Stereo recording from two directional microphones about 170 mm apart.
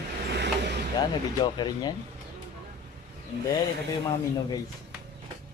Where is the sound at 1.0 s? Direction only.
25° left (ahead or behind).